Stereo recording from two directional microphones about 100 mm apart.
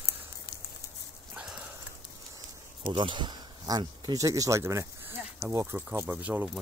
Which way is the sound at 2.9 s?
55° right (ahead or behind).